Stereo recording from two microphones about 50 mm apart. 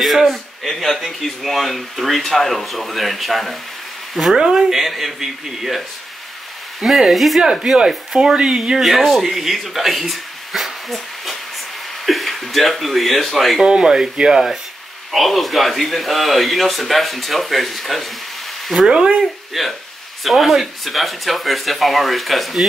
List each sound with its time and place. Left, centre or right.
0.0 s speech: centre
6.8 s speech: centre
13.6 s speech: centre
18.9 s speech: centre
19.6 s speech: centre